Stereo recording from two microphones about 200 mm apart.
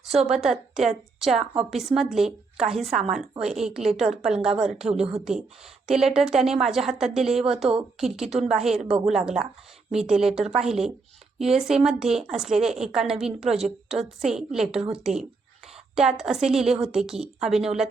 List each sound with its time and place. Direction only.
0.1 s a woman's voice: centre (ahead or behind)
4.9 s a woman's voice: 30° right (ahead or behind)
5.8 s a woman's voice: centre (ahead or behind)